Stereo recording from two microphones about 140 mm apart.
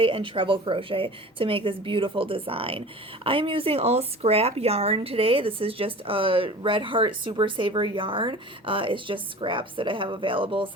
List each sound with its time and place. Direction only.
0.0 s a woman's voice: 40° right (ahead or behind)